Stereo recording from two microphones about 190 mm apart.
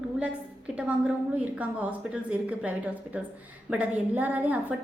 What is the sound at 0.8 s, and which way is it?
A woman's voice, 5° right (ahead or behind).